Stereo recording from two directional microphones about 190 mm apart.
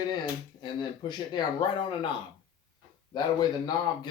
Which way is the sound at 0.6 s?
25° left (ahead or behind).